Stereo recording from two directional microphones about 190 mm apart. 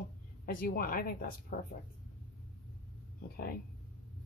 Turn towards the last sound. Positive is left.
turn(degrees=55)  # may be behind; listen again after turning